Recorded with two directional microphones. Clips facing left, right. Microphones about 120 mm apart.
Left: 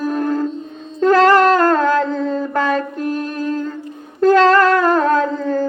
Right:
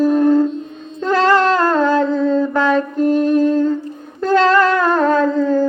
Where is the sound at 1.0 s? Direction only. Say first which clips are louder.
Left 3 dB; 45° left (ahead or behind).